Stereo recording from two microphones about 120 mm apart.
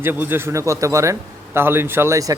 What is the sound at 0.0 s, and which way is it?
Speech, 20° right (ahead or behind).